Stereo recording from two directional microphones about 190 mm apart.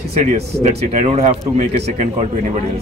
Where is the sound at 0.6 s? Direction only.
35° right (ahead or behind).